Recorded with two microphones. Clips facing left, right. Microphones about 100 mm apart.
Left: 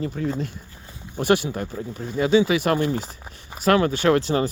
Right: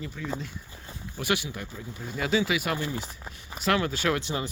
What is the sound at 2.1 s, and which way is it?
Speech, 30° left (ahead or behind).